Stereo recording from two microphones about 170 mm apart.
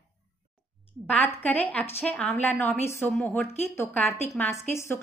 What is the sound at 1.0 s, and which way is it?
A woman's voice, 10° left (ahead or behind).